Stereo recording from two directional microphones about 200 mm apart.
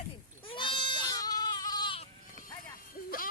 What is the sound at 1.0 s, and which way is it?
Goat, 20° left (ahead or behind).